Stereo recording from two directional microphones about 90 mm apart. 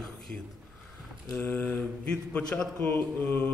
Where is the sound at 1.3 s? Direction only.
20° left (ahead or behind).